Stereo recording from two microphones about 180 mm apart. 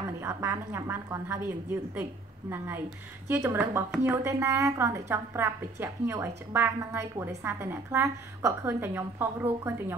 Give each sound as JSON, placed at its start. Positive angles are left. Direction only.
{"t": 0.2, "sound": "a woman's voice", "side_deg": -15}